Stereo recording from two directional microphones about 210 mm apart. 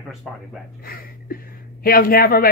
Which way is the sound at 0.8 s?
45° left (ahead or behind).